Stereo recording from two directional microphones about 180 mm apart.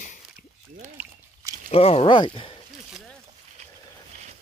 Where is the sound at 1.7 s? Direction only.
35° left (ahead or behind).